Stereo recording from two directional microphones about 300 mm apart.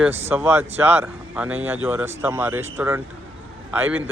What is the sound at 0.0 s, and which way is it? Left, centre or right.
A man's voice, centre.